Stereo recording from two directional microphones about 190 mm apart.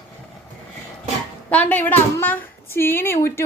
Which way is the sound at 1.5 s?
10° left (ahead or behind).